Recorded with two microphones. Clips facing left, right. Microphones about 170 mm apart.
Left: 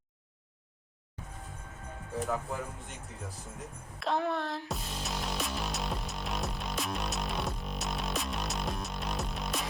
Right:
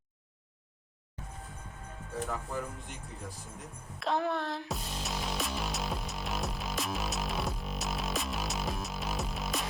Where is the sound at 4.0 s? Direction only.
Centre (ahead or behind).